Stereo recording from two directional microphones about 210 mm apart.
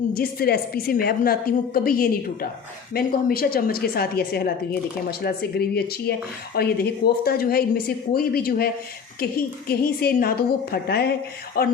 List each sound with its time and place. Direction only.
0.1 s a woman's voice: 45° left (ahead or behind)